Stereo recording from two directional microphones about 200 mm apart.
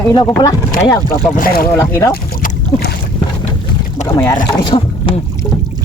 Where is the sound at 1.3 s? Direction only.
45° left (ahead or behind).